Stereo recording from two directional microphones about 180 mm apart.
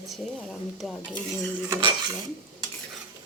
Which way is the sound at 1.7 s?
20° right (ahead or behind).